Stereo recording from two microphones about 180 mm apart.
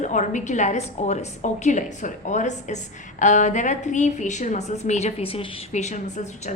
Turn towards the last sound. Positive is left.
turn(degrees=40)  # may be behind; listen again after turning